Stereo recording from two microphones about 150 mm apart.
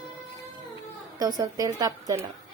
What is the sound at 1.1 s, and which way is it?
A woman's voice, 25° right (ahead or behind).